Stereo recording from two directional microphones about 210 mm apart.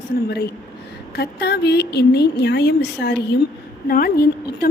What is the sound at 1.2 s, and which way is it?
A woman's voice, 50° left (ahead or behind).